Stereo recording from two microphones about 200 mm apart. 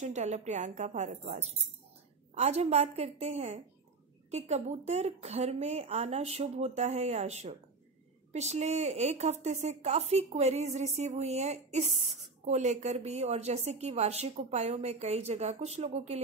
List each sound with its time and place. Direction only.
0.0 s a woman's voice: 35° right (ahead or behind)